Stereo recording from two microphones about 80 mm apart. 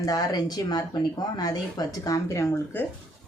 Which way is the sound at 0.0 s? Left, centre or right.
Left.